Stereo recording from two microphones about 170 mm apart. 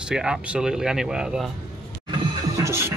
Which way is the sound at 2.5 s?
15° right (ahead or behind).